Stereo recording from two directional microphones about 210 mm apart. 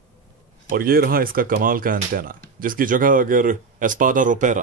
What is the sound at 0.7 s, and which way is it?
Speech, 45° right (ahead or behind).